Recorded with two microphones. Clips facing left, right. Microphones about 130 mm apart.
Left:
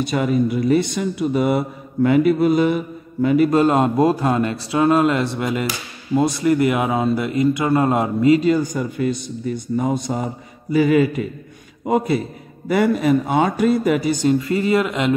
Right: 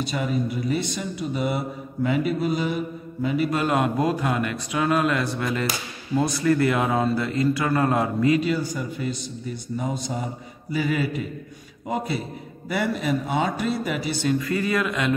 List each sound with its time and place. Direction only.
0.0 s speech: 55° left (ahead or behind)
3.4 s speech: 35° left (ahead or behind)
8.4 s a man's voice: 45° left (ahead or behind)
12.6 s a man's voice: 50° left (ahead or behind)
14.4 s speech: 25° left (ahead or behind)